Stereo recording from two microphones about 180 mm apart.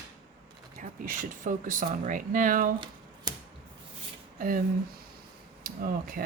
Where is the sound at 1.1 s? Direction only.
45° right (ahead or behind).